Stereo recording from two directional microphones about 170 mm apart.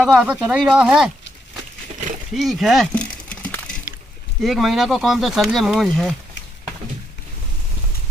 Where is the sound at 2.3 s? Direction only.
Centre (ahead or behind).